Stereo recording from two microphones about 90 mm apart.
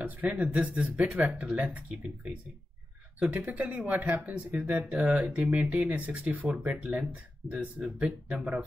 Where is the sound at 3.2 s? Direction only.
15° right (ahead or behind).